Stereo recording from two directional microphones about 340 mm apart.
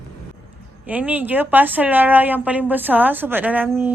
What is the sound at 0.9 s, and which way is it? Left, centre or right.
A woman's voice, centre.